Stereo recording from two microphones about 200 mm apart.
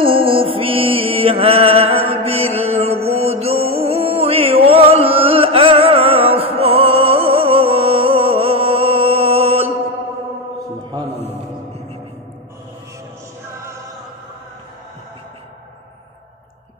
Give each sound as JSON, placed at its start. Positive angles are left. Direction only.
{"t": 0.0, "sound": "music", "side_deg": -25}